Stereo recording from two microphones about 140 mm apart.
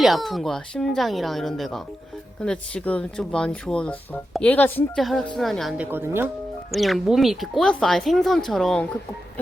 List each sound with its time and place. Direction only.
0.0 s speech: centre (ahead or behind)
5.7 s speech: 15° right (ahead or behind)
6.7 s speech: centre (ahead or behind)